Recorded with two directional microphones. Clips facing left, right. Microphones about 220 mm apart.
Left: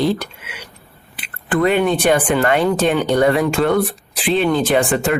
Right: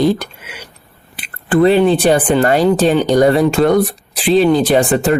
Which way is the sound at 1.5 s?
30° right (ahead or behind).